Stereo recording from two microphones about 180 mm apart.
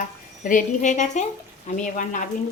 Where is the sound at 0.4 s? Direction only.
45° left (ahead or behind).